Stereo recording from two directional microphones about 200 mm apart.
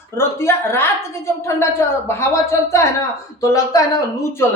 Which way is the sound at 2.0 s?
15° left (ahead or behind).